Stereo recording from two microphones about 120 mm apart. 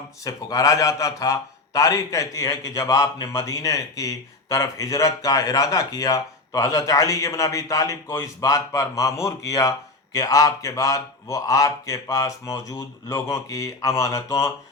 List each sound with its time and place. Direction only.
0.3 s a man's voice: 30° left (ahead or behind)